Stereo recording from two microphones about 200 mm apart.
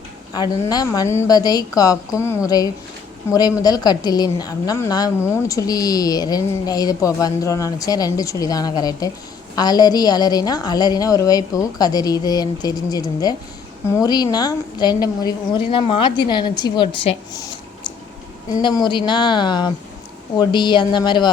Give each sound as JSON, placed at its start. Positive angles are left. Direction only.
{"t": 0.3, "sound": "a woman's voice", "side_deg": 20}
{"t": 3.6, "sound": "a woman's voice", "side_deg": 20}